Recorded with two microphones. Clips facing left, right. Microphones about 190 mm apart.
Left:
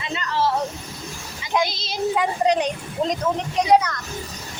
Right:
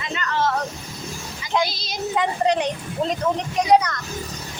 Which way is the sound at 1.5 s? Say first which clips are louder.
Even; 20° left (ahead or behind).